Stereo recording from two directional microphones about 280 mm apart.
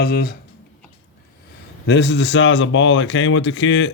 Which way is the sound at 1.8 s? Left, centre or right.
Left.